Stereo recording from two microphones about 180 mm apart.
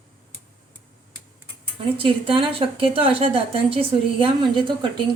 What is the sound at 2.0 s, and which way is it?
A woman's voice, 30° right (ahead or behind).